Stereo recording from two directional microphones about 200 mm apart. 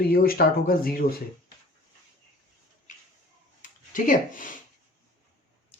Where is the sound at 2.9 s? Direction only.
40° left (ahead or behind).